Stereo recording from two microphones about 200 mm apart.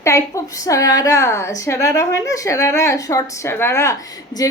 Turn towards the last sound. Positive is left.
turn(degrees=15)  # may be behind; listen again after turning